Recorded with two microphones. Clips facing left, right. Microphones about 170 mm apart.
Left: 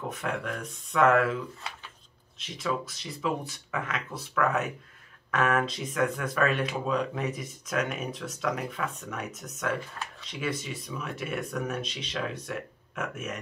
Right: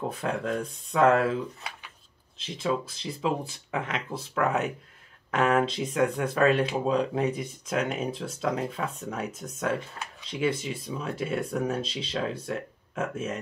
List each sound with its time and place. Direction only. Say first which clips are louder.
0.1 s speech: right 4 dB; 30° right (ahead or behind)